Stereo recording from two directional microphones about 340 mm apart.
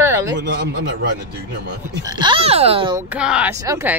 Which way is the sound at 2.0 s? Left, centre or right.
Centre.